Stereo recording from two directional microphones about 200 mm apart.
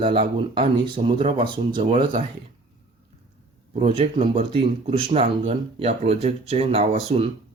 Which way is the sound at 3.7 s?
30° right (ahead or behind).